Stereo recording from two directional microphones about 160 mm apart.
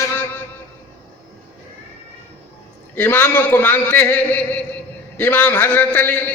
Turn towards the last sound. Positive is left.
turn(degrees=10)  # may be behind; listen again after turning